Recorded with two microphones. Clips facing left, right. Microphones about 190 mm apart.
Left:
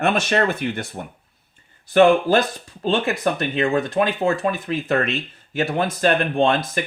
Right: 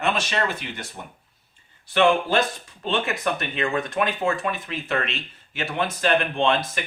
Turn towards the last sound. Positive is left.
turn(degrees=40)  # may be behind; listen again after turning